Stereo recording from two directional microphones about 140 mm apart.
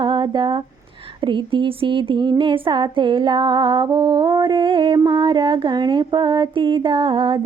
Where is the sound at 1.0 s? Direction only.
35° right (ahead or behind).